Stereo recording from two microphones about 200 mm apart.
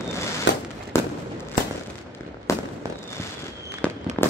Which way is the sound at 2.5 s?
15° left (ahead or behind).